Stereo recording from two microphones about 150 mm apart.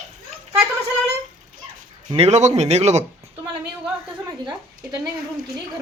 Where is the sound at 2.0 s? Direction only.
40° right (ahead or behind).